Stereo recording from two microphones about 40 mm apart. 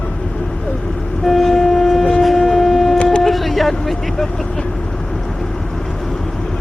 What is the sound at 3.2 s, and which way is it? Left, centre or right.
Speech, centre.